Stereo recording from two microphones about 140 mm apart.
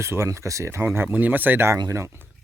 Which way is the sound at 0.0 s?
20° right (ahead or behind).